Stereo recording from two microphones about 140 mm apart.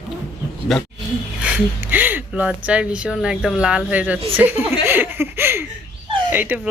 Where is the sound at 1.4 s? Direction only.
10° right (ahead or behind).